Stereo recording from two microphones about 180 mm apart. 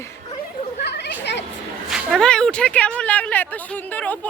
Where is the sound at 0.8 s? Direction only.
65° left (ahead or behind).